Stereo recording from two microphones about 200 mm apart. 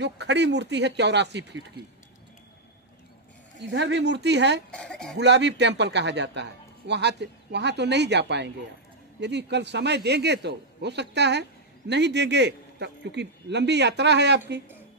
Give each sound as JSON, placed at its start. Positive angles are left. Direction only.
{"t": 0.0, "sound": "speech", "side_deg": -60}
{"t": 3.5, "sound": "speech", "side_deg": -60}
{"t": 4.6, "sound": "speech", "side_deg": 5}
{"t": 5.2, "sound": "speech", "side_deg": -60}